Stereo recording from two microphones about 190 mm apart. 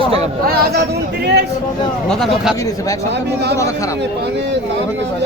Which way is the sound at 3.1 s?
60° right (ahead or behind).